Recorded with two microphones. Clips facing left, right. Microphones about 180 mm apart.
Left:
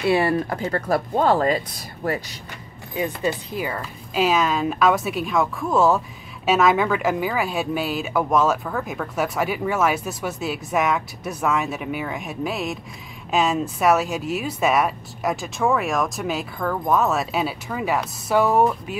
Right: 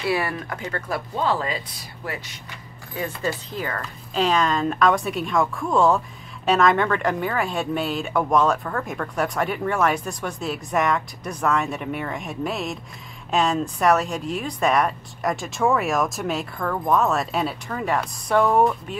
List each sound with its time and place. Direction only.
0.0 s speech: 25° left (ahead or behind); by 1.6 s 45° left (ahead or behind)
2.9 s speech: 20° left (ahead or behind)